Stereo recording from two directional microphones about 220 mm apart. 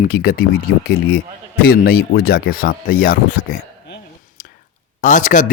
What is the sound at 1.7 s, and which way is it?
Speech, 45° left (ahead or behind).